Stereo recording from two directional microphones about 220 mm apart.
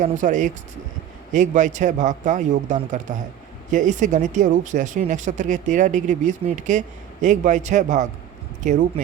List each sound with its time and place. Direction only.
0.0 s speech: 35° right (ahead or behind)